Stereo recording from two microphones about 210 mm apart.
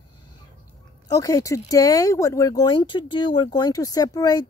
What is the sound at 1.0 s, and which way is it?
Speech, 15° left (ahead or behind).